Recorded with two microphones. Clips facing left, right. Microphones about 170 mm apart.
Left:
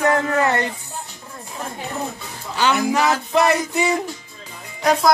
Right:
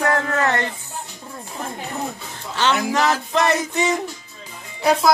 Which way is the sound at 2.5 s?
10° left (ahead or behind).